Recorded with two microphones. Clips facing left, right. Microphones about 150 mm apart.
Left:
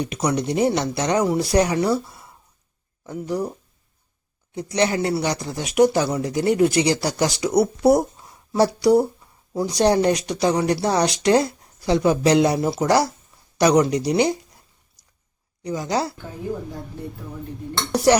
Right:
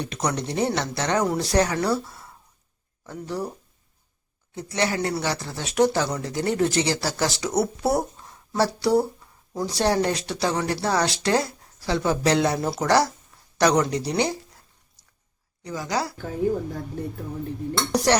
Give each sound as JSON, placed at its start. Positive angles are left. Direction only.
{"t": 0.0, "sound": "speech", "side_deg": 10}
{"t": 4.5, "sound": "a man's voice", "side_deg": 20}
{"t": 12.5, "sound": "speech", "side_deg": 0}
{"t": 12.8, "sound": "speech", "side_deg": 10}
{"t": 15.6, "sound": "a man's voice", "side_deg": 20}
{"t": 17.9, "sound": "a sound", "side_deg": 10}